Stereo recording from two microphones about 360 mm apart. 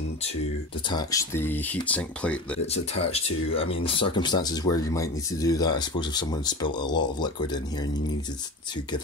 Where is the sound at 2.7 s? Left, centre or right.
Centre.